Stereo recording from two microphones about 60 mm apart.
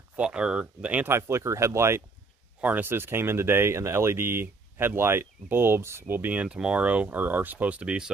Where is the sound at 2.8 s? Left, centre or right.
Right.